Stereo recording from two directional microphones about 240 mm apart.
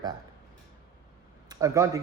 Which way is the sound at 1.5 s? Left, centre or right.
Centre.